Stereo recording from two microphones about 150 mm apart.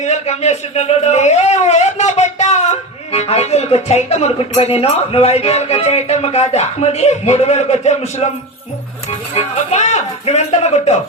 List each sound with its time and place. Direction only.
0.0 s a man's voice: 50° left (ahead or behind)